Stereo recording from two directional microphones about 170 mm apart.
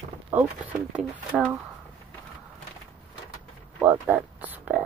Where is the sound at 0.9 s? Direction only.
5° right (ahead or behind).